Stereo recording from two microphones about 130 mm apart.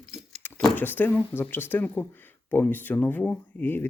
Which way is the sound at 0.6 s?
15° left (ahead or behind).